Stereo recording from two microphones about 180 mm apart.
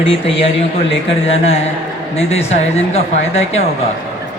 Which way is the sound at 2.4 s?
35° left (ahead or behind).